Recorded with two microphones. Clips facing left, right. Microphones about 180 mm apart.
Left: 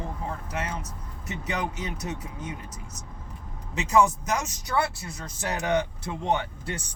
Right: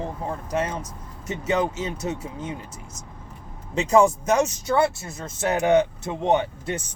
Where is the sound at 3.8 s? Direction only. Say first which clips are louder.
Right 4 dB; 30° right (ahead or behind).